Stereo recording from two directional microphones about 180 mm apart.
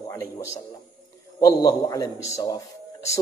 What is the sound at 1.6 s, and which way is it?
A man's voice, 20° left (ahead or behind).